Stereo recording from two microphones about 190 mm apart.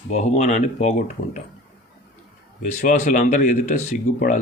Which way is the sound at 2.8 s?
40° left (ahead or behind).